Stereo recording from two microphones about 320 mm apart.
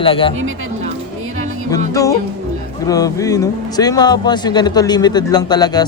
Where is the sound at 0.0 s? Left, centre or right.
Centre.